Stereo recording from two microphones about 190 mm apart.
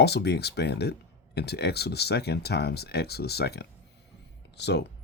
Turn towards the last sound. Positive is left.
turn(degrees=65)  # may be behind; listen again after turning